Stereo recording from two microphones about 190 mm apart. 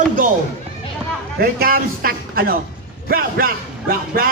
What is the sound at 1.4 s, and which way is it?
A man's voice, 50° right (ahead or behind).